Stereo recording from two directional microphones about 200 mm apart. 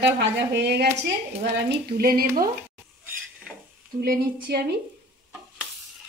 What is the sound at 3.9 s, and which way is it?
Speech, 50° right (ahead or behind).